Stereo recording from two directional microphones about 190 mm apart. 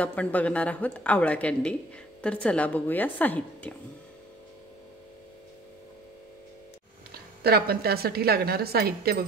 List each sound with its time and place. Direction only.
0.0 s a woman's voice: 5° left (ahead or behind)
7.4 s speech: 55° right (ahead or behind)